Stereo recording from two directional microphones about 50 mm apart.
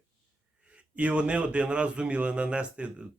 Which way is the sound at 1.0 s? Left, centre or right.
Right.